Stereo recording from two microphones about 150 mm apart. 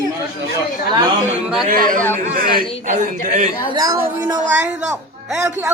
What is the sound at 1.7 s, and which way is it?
A man's voice, 65° right (ahead or behind).